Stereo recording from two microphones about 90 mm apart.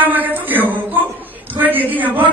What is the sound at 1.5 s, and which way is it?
Speech, 20° right (ahead or behind).